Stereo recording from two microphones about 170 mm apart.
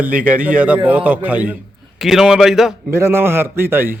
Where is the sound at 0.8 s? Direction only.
10° right (ahead or behind).